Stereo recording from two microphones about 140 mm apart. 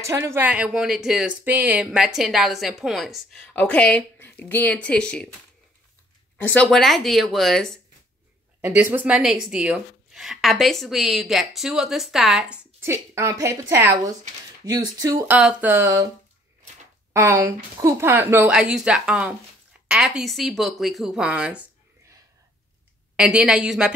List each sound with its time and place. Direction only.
0.0 s speech: 20° right (ahead or behind); by 5.3 s 5° left (ahead or behind)
6.3 s speech: 10° left (ahead or behind)
8.5 s speech: 15° right (ahead or behind)
12.8 s a woman's voice: 20° right (ahead or behind)
15.2 s speech: 10° right (ahead or behind)
17.1 s a woman's voice: 20° right (ahead or behind)
18.5 s speech: 5° right (ahead or behind)
23.1 s speech: 5° right (ahead or behind)